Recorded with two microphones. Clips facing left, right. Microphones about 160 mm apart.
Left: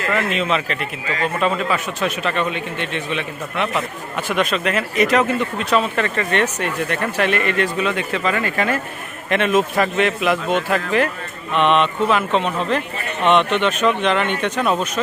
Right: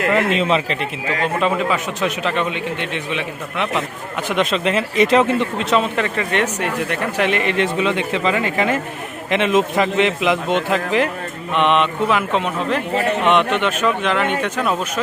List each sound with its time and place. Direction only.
0.3 s speech: 30° right (ahead or behind)
1.4 s speech: 15° right (ahead or behind)
6.0 s speech: 10° right (ahead or behind)
12.9 s speech: 90° right
13.2 s speech: 10° right (ahead or behind)